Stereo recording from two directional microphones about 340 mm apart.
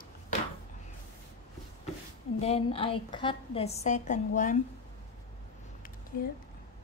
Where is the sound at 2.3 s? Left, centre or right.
Centre.